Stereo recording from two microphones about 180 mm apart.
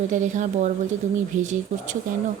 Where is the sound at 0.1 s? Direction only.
45° right (ahead or behind).